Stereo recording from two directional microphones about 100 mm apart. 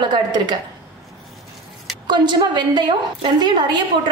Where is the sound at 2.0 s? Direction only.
45° right (ahead or behind).